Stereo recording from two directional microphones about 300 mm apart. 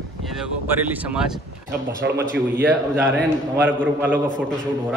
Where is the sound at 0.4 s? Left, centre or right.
Centre.